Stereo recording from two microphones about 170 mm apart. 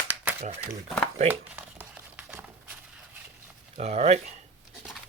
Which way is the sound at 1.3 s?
10° right (ahead or behind).